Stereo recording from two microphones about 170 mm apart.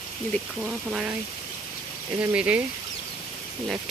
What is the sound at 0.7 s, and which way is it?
Speech, 5° right (ahead or behind).